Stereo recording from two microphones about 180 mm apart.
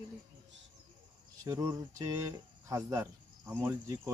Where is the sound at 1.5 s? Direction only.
20° right (ahead or behind).